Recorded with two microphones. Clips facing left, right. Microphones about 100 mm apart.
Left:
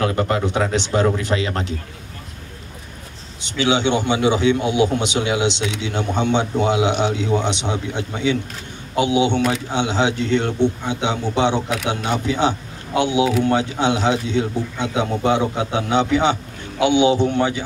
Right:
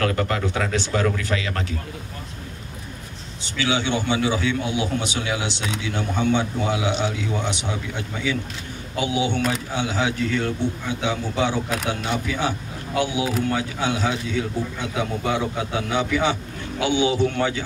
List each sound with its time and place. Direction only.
0.0 s a man's voice: 20° left (ahead or behind)
3.4 s a man's voice: 20° left (ahead or behind)